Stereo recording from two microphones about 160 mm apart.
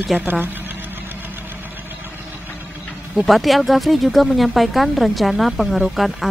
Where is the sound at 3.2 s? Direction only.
Centre (ahead or behind).